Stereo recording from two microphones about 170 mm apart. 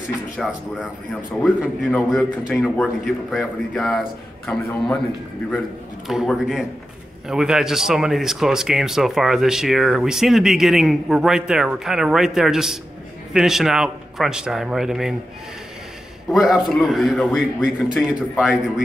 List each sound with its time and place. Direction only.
0.4 s speech: centre (ahead or behind)
6.0 s speech: centre (ahead or behind)
16.3 s speech: centre (ahead or behind)